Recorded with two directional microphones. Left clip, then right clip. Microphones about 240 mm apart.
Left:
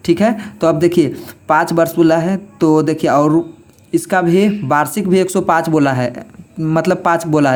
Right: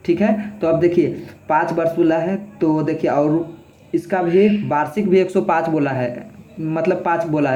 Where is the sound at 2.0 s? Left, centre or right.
Left.